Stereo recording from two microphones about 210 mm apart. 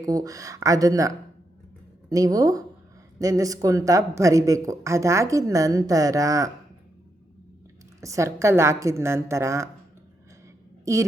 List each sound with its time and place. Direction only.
0.0 s speech: 15° right (ahead or behind)
8.0 s speech: 15° right (ahead or behind)
10.9 s speech: 15° right (ahead or behind)